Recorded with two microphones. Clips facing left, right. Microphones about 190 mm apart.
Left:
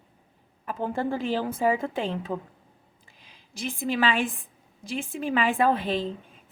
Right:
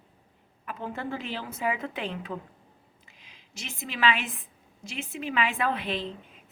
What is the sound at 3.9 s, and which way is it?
Speech, 35° left (ahead or behind).